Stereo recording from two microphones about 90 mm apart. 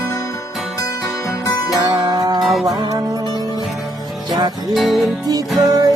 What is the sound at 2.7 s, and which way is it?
Music, 50° right (ahead or behind).